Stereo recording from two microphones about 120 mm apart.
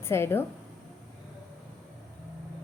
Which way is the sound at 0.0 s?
20° left (ahead or behind).